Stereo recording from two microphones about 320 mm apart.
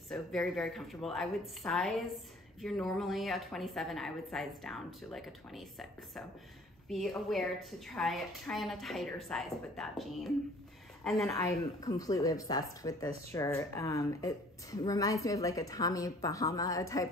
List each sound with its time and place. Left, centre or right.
0.1 s a woman's voice: centre